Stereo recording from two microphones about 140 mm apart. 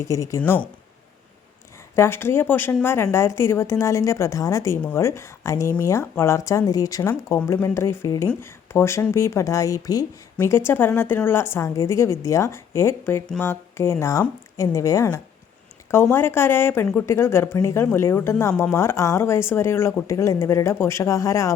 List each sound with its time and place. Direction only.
0.0 s speech: 20° left (ahead or behind)
2.0 s speech: 15° left (ahead or behind)
13.2 s speech: 5° left (ahead or behind)
13.5 s speech: 20° left (ahead or behind)